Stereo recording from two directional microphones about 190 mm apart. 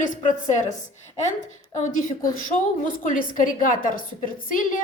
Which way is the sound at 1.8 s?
40° left (ahead or behind).